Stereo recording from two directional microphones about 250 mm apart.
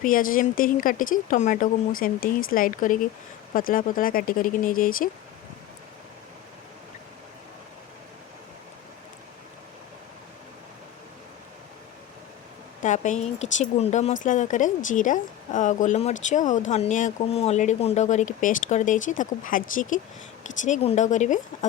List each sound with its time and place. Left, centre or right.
0.0 s speech: left
12.8 s a woman's voice: left